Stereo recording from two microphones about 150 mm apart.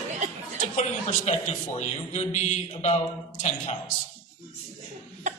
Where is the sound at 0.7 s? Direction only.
50° left (ahead or behind).